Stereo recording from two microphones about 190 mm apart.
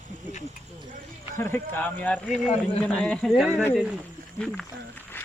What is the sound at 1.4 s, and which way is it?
A man's voice, 10° left (ahead or behind).